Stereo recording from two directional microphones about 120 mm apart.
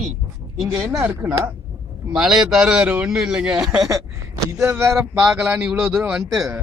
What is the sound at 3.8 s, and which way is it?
Speech, 25° right (ahead or behind).